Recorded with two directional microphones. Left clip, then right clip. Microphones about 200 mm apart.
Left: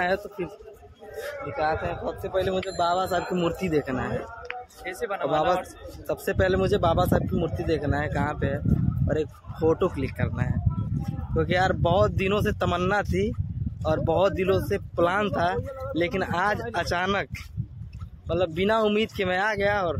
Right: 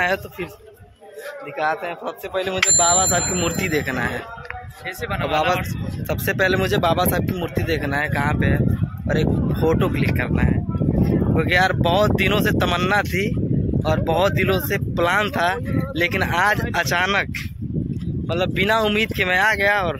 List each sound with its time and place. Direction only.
0.0 s a man's voice: 5° right (ahead or behind)
1.6 s a man's voice: 20° right (ahead or behind)
2.3 s speech: centre (ahead or behind)
18.3 s speech: 5° right (ahead or behind)